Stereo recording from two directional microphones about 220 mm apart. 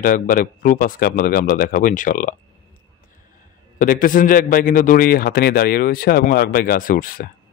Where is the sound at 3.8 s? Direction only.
40° left (ahead or behind).